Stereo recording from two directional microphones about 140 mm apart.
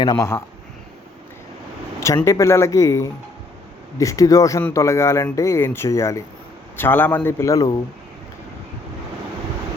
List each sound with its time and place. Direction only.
0.0 s a man's voice: 30° left (ahead or behind)
2.2 s a man's voice: 20° left (ahead or behind)